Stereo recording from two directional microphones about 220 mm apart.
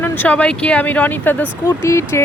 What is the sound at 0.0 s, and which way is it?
Speech, 5° left (ahead or behind).